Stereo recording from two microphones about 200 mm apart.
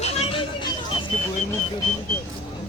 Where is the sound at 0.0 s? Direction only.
30° left (ahead or behind).